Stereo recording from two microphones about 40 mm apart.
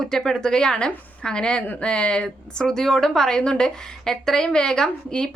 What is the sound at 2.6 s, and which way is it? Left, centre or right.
A woman's voice, centre.